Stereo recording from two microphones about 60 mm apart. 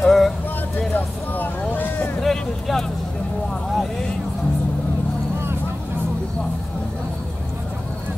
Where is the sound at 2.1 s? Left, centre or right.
Centre.